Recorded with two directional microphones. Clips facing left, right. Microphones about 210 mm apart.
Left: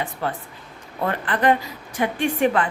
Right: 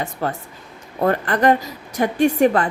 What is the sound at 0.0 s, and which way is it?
A woman's voice, 45° right (ahead or behind).